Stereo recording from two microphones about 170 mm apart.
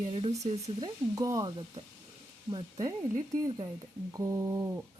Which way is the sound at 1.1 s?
20° right (ahead or behind).